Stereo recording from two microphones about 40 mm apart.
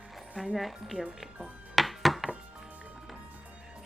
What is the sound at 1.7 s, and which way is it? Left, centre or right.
Music, centre.